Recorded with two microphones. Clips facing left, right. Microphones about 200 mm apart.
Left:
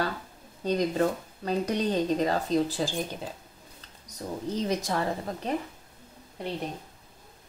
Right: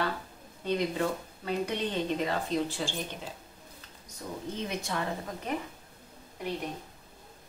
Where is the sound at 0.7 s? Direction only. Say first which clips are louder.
Left 4 dB; 40° left (ahead or behind).